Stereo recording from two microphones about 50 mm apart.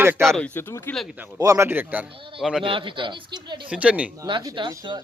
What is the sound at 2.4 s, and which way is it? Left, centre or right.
Speech, centre.